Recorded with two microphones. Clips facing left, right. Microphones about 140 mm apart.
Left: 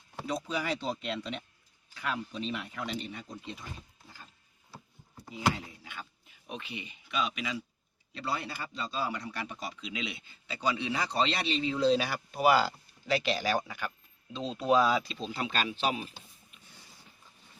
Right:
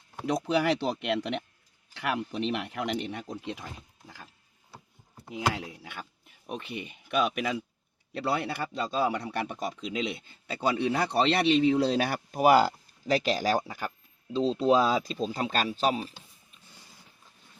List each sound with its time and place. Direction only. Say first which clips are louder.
0.3 s speech: right 7 dB; 70° right (ahead or behind)
5.8 s a sound: right 3 dB; 55° right (ahead or behind)
6.5 s speech: right 5 dB; 50° right (ahead or behind); by 16.1 s 35° right (ahead or behind)